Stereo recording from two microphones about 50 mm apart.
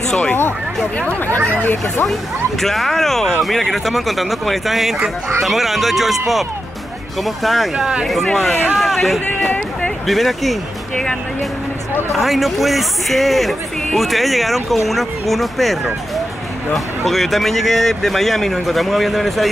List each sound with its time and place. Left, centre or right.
1.5 s speech: left
2.6 s speech: centre
7.7 s speech: centre
8.0 s speech: centre
12.1 s speech: centre